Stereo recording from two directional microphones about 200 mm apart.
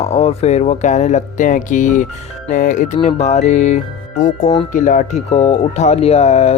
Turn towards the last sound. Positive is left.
turn(degrees=30)  # may be behind; listen again after turning